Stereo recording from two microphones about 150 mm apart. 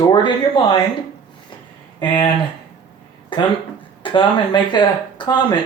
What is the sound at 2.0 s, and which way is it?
Speech, 30° left (ahead or behind).